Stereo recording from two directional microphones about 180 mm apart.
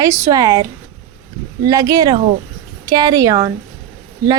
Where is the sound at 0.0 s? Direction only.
20° right (ahead or behind).